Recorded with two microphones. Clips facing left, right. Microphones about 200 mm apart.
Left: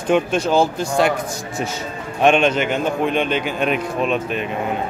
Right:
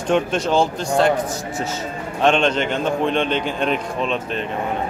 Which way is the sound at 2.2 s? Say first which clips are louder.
Left 2 dB; 10° left (ahead or behind).